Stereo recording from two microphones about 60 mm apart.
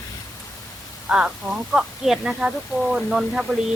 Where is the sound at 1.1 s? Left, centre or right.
Centre.